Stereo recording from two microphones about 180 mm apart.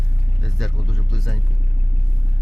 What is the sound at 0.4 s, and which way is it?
Speech, centre (ahead or behind).